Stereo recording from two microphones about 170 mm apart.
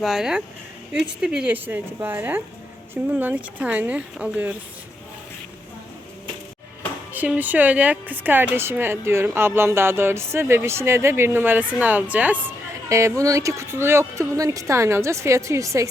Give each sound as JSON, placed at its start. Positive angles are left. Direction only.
{"t": 0.0, "sound": "speech", "side_deg": 0}
{"t": 7.1, "sound": "speech", "side_deg": -10}